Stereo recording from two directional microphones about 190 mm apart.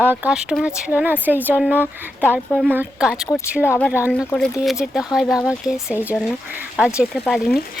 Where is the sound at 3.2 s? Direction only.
15° left (ahead or behind).